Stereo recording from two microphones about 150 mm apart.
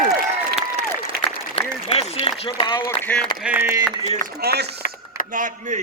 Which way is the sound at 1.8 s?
40° left (ahead or behind).